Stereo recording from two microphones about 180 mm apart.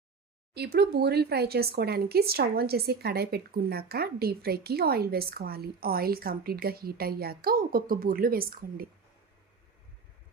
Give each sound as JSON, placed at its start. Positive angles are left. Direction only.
{"t": 0.5, "sound": "speech", "side_deg": -65}